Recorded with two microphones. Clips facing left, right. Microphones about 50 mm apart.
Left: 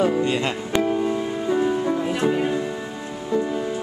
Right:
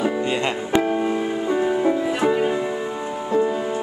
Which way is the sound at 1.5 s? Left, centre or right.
Centre.